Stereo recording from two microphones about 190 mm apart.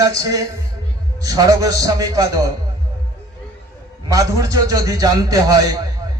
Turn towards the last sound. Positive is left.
turn(degrees=-20)  # may be behind; listen again after turning